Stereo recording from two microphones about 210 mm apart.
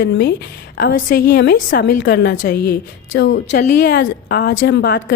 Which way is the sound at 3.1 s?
60° left (ahead or behind).